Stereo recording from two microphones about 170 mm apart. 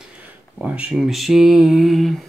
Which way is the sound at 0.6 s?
5° right (ahead or behind).